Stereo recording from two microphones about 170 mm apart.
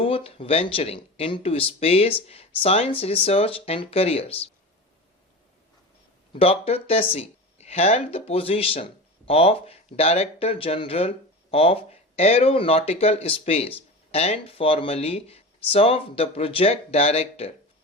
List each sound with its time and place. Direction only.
0.0 s speech: 35° left (ahead or behind)
6.3 s speech: 35° left (ahead or behind)